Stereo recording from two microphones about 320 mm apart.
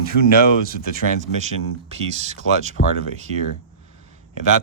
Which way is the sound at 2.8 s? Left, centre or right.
Left.